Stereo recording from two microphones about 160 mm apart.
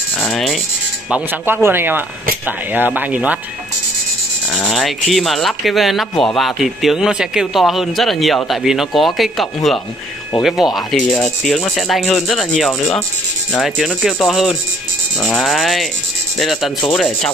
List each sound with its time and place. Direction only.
0.2 s speech: centre (ahead or behind)
1.1 s speech: 10° right (ahead or behind)
4.5 s speech: 5° left (ahead or behind)